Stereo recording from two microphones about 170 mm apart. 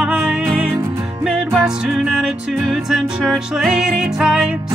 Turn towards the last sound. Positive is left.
turn(degrees=-5)  # may be behind; listen again after turning